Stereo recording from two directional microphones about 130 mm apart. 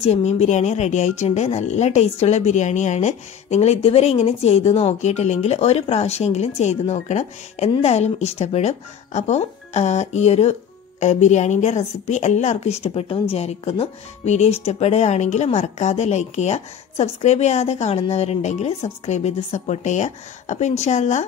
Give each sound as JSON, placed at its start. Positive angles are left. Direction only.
{"t": 0.0, "sound": "speech", "side_deg": 55}